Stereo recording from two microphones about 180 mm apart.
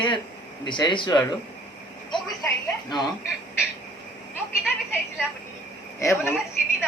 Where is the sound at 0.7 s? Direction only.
25° left (ahead or behind).